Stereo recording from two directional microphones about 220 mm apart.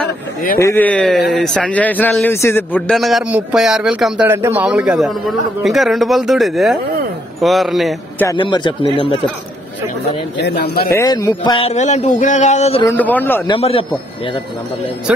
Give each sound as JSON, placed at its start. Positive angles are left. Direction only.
{"t": 0.6, "sound": "a man's voice", "side_deg": 10}
{"t": 8.3, "sound": "speech", "side_deg": 20}
{"t": 10.3, "sound": "speech", "side_deg": 50}
{"t": 11.0, "sound": "speech", "side_deg": 15}
{"t": 12.8, "sound": "speech", "side_deg": 10}
{"t": 13.5, "sound": "speech", "side_deg": 25}
{"t": 15.1, "sound": "a man's voice", "side_deg": -5}